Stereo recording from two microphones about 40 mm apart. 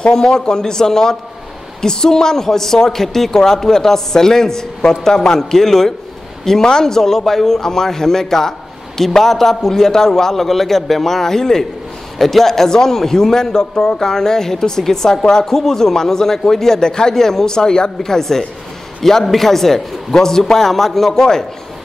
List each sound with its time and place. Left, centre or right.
0.1 s a man's voice: centre